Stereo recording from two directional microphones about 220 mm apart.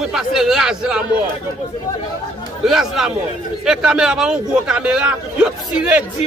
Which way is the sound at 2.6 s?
Centre (ahead or behind).